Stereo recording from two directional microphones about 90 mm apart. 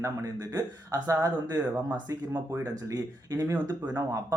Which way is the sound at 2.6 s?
40° right (ahead or behind).